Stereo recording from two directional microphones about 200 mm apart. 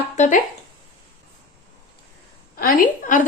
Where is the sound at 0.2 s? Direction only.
40° left (ahead or behind).